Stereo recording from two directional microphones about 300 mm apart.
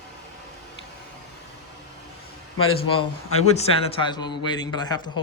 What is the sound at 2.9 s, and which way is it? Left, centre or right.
A man's voice, left.